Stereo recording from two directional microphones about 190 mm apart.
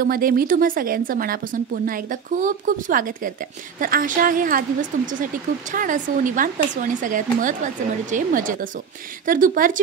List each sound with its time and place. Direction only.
0.0 s speech: 50° right (ahead or behind)